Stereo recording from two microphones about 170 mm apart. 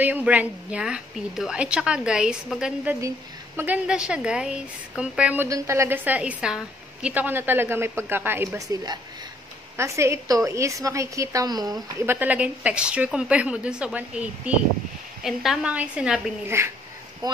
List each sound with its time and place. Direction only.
0.0 s a woman's voice: 10° right (ahead or behind)